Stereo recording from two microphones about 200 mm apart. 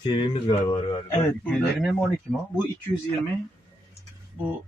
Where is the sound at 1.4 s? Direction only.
Centre (ahead or behind).